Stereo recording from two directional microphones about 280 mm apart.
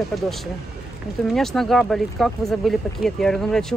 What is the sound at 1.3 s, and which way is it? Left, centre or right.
Speech, centre.